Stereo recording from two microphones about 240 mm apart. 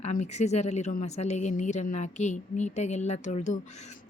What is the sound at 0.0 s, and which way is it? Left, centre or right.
Speech, left.